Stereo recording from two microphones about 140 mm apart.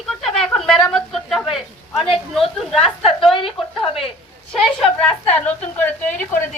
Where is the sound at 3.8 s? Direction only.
40° left (ahead or behind).